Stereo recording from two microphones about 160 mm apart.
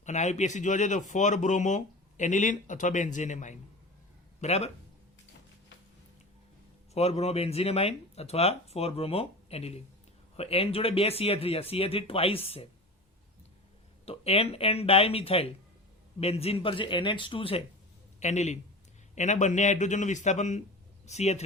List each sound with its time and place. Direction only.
0.0 s speech: 45° left (ahead or behind)
6.9 s speech: 40° left (ahead or behind)
14.0 s speech: 40° left (ahead or behind)
18.2 s a man's voice: 45° left (ahead or behind)